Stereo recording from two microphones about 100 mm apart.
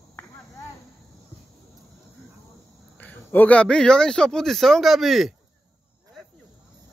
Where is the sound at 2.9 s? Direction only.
15° left (ahead or behind); by 5.3 s centre (ahead or behind).